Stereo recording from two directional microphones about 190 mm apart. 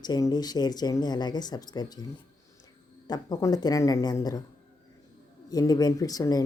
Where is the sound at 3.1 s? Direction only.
20° left (ahead or behind).